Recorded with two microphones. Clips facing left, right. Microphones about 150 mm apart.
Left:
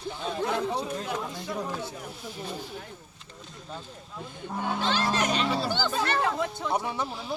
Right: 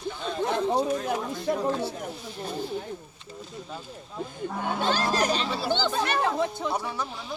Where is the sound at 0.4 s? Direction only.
25° right (ahead or behind).